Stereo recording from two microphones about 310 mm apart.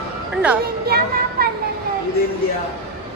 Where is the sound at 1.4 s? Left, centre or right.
Right.